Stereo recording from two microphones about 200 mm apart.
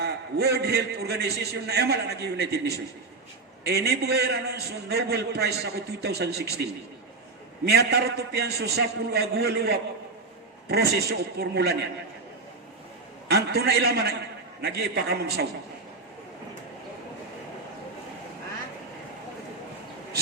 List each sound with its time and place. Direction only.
0.0 s a man's voice: 55° right (ahead or behind)
13.2 s speech: 55° right (ahead or behind)